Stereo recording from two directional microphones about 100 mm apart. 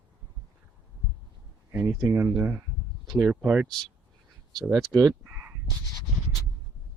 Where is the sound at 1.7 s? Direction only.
20° right (ahead or behind).